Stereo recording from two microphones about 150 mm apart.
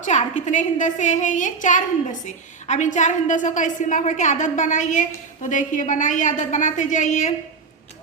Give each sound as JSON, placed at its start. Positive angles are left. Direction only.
{"t": 0.0, "sound": "a woman's voice", "side_deg": 55}